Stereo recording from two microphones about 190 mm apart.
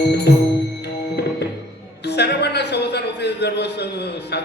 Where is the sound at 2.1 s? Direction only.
60° left (ahead or behind).